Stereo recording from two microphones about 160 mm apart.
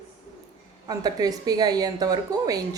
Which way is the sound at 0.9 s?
25° right (ahead or behind).